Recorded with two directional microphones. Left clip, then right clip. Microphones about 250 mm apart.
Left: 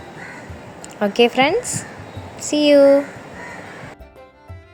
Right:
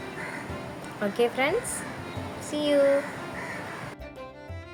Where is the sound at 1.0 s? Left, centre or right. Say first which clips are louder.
Left 10 dB; left.